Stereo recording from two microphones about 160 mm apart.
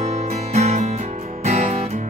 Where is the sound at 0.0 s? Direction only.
40° right (ahead or behind).